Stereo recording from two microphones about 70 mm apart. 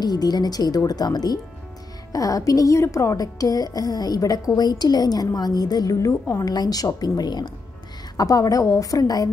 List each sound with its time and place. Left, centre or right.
0.0 s speech: left
2.1 s a woman's voice: left
6.5 s speech: left
7.0 s speech: left
8.2 s a woman's voice: left